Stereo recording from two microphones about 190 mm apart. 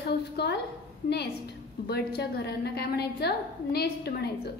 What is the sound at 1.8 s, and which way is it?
A woman's voice, 55° left (ahead or behind).